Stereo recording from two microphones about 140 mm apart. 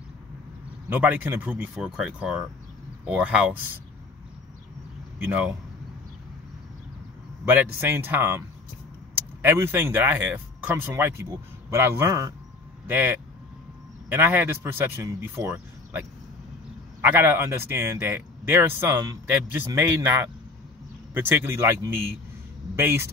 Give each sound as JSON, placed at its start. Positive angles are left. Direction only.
{"t": 0.8, "sound": "a man's voice", "side_deg": -10}
{"t": 5.2, "sound": "a man's voice", "side_deg": -10}
{"t": 7.4, "sound": "a man's voice", "side_deg": -15}
{"t": 17.0, "sound": "a man's voice", "side_deg": -15}